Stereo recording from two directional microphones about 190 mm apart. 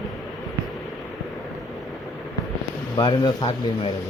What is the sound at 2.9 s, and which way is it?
Speech, 20° left (ahead or behind).